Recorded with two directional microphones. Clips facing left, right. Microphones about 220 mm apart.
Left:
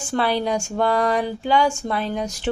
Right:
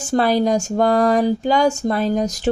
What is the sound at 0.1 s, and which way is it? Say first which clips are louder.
A woman's voice: right 5 dB; 40° right (ahead or behind).